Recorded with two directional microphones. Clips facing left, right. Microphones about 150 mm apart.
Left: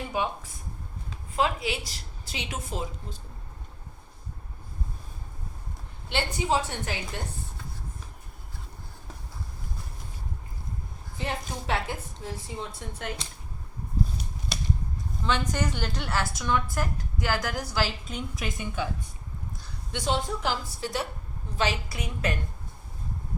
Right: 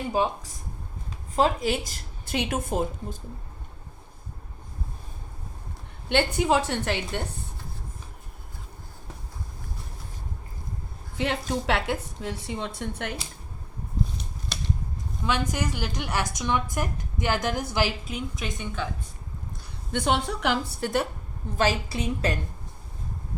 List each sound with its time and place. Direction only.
0.2 s speech: 35° right (ahead or behind)
1.4 s a woman's voice: 40° right (ahead or behind)
6.1 s a woman's voice: 60° right (ahead or behind)
11.2 s a woman's voice: 75° right (ahead or behind)
15.2 s a woman's voice: 10° right (ahead or behind)
18.1 s a woman's voice: centre (ahead or behind)
19.9 s a woman's voice: 60° right (ahead or behind)
21.8 s a woman's voice: 30° right (ahead or behind)